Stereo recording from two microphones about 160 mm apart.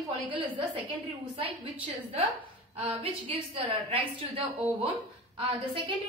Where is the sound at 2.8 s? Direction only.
40° right (ahead or behind).